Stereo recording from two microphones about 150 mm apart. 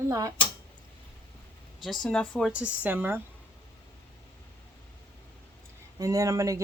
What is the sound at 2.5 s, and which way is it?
Speech, 10° right (ahead or behind).